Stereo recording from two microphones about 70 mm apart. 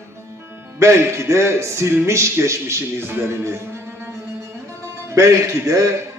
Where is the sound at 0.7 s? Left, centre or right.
Right.